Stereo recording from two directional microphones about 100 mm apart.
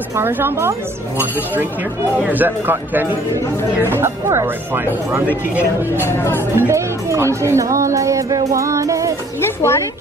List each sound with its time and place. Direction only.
0.1 s speech: 20° right (ahead or behind)
5.9 s speech: 25° left (ahead or behind)
6.5 s a woman's voice: 30° right (ahead or behind)
9.4 s music: 25° left (ahead or behind)